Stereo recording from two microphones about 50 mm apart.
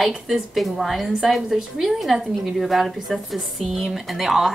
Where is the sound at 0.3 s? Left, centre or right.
Centre.